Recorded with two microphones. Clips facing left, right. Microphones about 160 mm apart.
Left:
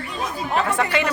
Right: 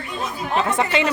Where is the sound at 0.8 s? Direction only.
20° right (ahead or behind).